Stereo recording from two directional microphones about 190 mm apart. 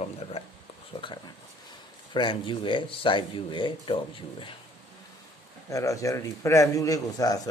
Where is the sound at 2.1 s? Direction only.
25° left (ahead or behind).